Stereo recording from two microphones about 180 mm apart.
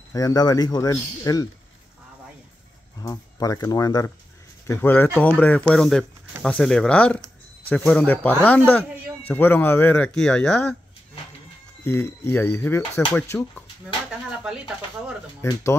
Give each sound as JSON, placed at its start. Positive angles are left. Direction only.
{"t": 0.1, "sound": "speech", "side_deg": 20}
{"t": 3.0, "sound": "speech", "side_deg": 20}
{"t": 11.8, "sound": "speech", "side_deg": 15}
{"t": 15.4, "sound": "speech", "side_deg": 15}